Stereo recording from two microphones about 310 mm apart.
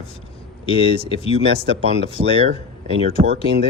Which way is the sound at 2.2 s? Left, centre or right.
Right.